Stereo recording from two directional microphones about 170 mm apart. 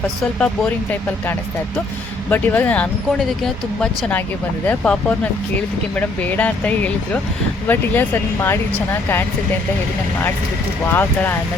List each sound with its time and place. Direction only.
0.3 s speech: 5° left (ahead or behind)
2.3 s speech: 10° left (ahead or behind)